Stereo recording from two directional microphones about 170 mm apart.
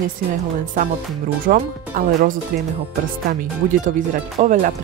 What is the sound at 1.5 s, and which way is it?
Speech, 50° right (ahead or behind).